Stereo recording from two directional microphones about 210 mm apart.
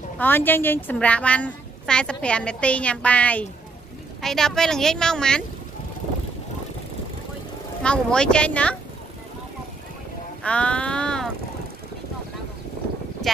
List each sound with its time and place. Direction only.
0.2 s a woman's voice: 10° left (ahead or behind)
7.8 s a woman's voice: 5° left (ahead or behind)
10.4 s a woman's voice: 5° left (ahead or behind)